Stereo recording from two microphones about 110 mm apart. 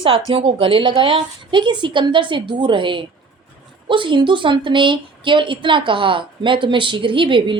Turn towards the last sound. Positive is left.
turn(degrees=-50)  # may be behind; listen again after turning